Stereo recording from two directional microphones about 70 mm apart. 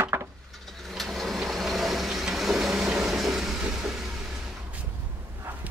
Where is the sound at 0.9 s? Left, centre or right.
Centre.